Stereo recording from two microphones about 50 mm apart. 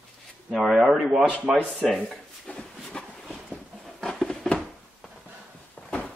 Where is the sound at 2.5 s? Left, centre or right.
Centre.